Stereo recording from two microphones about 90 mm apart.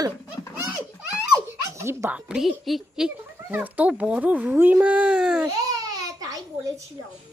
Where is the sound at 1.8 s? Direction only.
30° right (ahead or behind).